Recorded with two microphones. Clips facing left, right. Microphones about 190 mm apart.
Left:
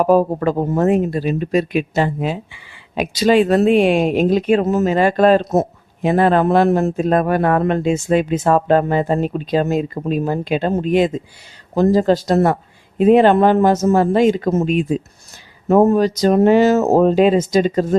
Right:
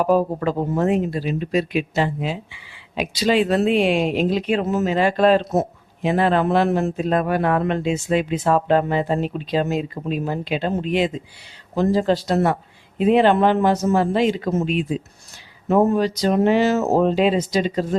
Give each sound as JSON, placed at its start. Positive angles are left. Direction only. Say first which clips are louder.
{"t": 0.0, "sound": "speech", "louder": "left 4 dB", "side_deg": 45}